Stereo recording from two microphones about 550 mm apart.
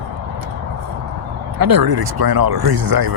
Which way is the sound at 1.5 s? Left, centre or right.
Right.